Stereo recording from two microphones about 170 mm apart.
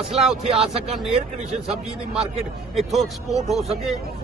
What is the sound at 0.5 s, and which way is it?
Speech, 35° right (ahead or behind).